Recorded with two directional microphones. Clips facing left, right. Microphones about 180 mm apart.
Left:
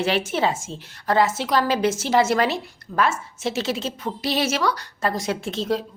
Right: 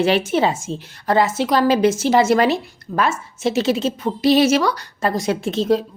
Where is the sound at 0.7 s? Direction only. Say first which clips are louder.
Right 8 dB; 65° right (ahead or behind).